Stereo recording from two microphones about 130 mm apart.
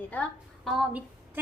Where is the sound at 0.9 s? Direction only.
10° right (ahead or behind).